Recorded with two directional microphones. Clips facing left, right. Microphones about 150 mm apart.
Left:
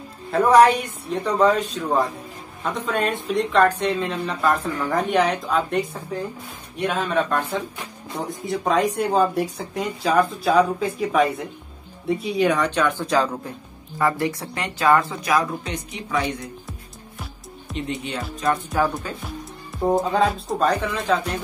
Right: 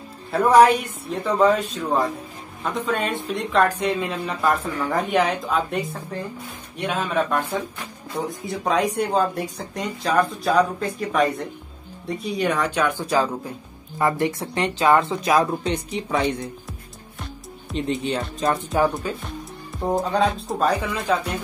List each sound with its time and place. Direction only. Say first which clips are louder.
0.3 s speech: even; centre (ahead or behind)
13.9 s speech: right 1 dB; 20° right (ahead or behind)
17.7 s speech: right 4 dB; 35° right (ahead or behind)
19.2 s speech: even; 5° left (ahead or behind)